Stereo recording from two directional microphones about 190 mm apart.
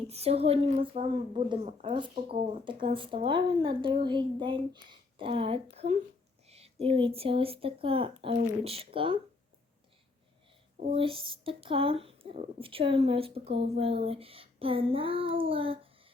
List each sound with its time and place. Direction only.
0.1 s a woman's voice: 35° right (ahead or behind)
10.8 s a woman's voice: 30° right (ahead or behind)